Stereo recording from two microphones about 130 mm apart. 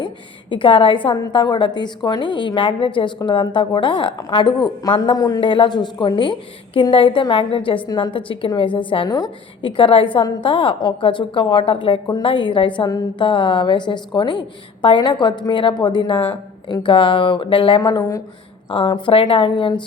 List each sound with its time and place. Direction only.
0.5 s a woman's voice: 45° left (ahead or behind)
5.4 s a woman's voice: 40° left (ahead or behind)
9.0 s a woman's voice: 30° left (ahead or behind)
9.6 s a woman's voice: 45° left (ahead or behind)